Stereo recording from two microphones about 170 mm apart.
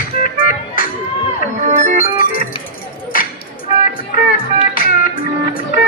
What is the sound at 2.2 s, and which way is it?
Music, 60° left (ahead or behind).